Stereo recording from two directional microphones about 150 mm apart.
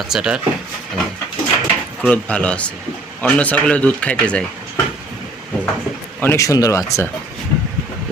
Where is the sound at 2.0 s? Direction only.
10° left (ahead or behind).